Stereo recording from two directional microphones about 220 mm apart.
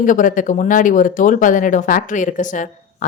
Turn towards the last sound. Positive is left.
turn(degrees=35)  # may be behind; listen again after turning